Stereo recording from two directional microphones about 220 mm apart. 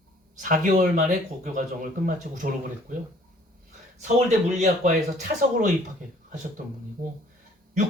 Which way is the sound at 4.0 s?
35° right (ahead or behind).